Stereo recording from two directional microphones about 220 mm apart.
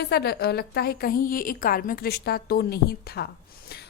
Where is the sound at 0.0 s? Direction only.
45° left (ahead or behind).